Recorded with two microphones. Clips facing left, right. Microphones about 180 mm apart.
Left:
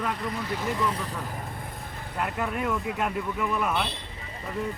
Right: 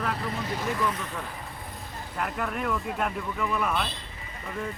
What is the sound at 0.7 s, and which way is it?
Speech, 30° left (ahead or behind).